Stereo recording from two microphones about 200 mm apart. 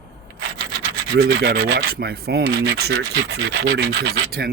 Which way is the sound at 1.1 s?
55° right (ahead or behind).